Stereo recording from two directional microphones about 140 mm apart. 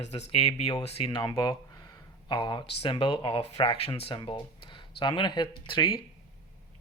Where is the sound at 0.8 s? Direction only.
40° left (ahead or behind).